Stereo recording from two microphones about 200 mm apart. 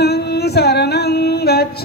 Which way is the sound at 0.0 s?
55° left (ahead or behind).